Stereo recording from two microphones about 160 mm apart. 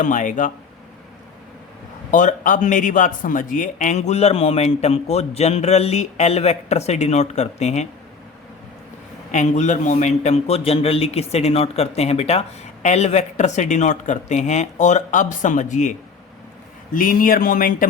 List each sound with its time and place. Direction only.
0.0 s a man's voice: 50° left (ahead or behind)
2.0 s a man's voice: 55° left (ahead or behind)
9.3 s a man's voice: 50° left (ahead or behind)